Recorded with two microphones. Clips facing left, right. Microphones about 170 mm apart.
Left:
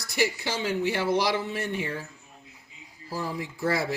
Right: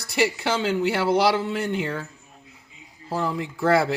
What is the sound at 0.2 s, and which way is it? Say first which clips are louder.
Speech: right 5 dB; 80° right.